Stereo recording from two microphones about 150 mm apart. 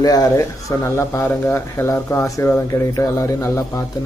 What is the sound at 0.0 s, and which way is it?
A man's voice, 25° left (ahead or behind).